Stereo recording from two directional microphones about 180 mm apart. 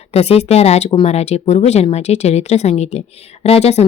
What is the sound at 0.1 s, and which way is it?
A woman's voice, 35° left (ahead or behind).